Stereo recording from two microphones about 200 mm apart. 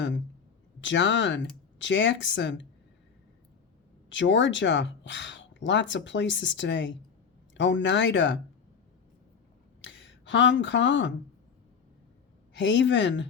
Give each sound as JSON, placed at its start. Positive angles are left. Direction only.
{"t": 0.8, "sound": "speech", "side_deg": 65}
{"t": 4.1, "sound": "speech", "side_deg": 65}
{"t": 9.8, "sound": "speech", "side_deg": 65}
{"t": 12.5, "sound": "speech", "side_deg": 65}